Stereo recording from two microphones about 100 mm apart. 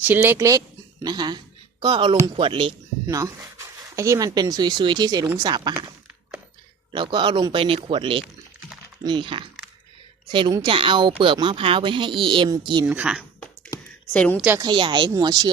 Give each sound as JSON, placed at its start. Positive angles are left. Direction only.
{"t": 0.0, "sound": "speech", "side_deg": -20}
{"t": 1.0, "sound": "speech", "side_deg": -45}
{"t": 3.1, "sound": "speech", "side_deg": -35}
{"t": 6.9, "sound": "speech", "side_deg": -55}
{"t": 7.5, "sound": "a woman's voice", "side_deg": -60}
{"t": 12.8, "sound": "speech", "side_deg": -15}
{"t": 14.1, "sound": "a woman's voice", "side_deg": 15}
{"t": 14.6, "sound": "speech", "side_deg": -55}
{"t": 15.2, "sound": "speech", "side_deg": -40}